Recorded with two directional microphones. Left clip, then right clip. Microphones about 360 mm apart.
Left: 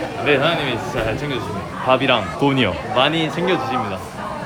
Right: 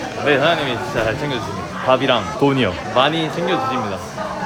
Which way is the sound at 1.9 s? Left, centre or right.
Centre.